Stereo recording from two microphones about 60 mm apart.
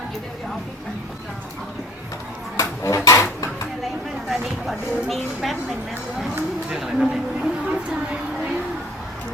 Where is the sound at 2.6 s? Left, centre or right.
Left.